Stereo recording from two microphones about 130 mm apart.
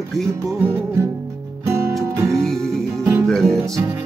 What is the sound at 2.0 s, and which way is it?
Music, 25° right (ahead or behind).